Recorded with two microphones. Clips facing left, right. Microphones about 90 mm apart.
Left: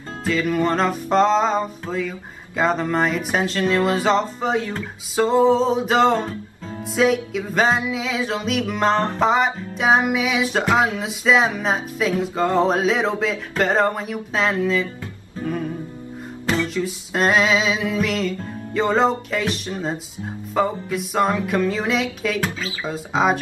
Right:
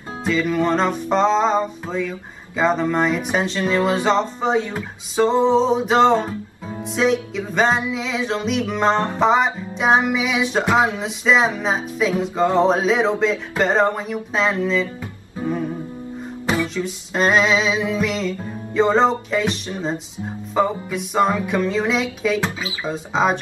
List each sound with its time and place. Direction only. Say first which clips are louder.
0.2 s music: right 1 dB; centre (ahead or behind)
16.6 s music: left 1 dB; centre (ahead or behind)
22.4 s speech: right 1 dB; 15° right (ahead or behind)
22.8 s music: even; centre (ahead or behind)